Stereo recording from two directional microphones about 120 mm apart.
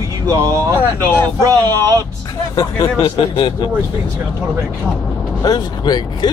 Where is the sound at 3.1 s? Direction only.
45° left (ahead or behind).